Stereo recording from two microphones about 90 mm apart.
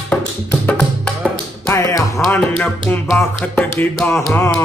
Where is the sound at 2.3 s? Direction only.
15° left (ahead or behind).